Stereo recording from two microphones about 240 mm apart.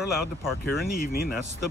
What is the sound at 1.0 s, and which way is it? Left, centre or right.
Speech, left.